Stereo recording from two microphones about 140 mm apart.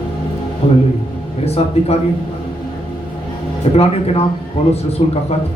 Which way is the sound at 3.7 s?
45° left (ahead or behind).